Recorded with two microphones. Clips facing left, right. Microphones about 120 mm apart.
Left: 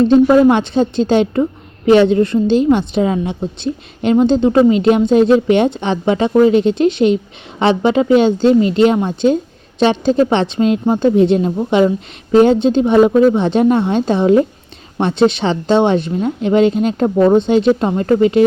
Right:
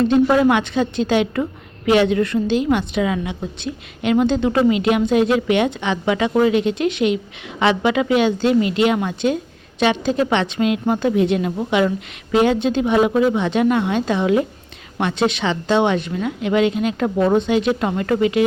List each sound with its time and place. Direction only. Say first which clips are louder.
0.3 s a woman's voice: left 5 dB; 30° left (ahead or behind)